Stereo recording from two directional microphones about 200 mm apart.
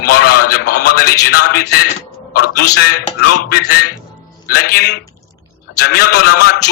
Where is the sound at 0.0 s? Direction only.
50° left (ahead or behind).